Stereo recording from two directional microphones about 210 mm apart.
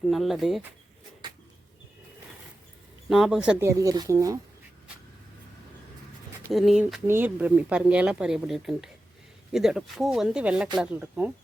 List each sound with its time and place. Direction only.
0.0 s speech: centre (ahead or behind)
3.1 s speech: centre (ahead or behind)
6.5 s speech: centre (ahead or behind)